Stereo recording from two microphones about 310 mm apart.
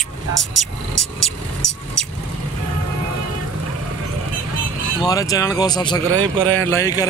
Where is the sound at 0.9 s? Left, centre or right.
Left.